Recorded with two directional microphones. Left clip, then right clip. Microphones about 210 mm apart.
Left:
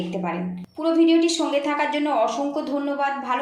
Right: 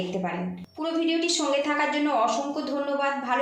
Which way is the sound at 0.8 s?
30° left (ahead or behind).